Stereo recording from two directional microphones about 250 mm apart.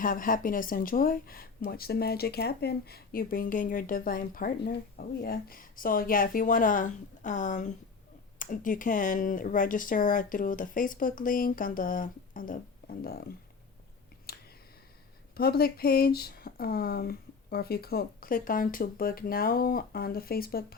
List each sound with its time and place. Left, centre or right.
0.0 s speech: left
14.3 s a sound: left
15.4 s speech: left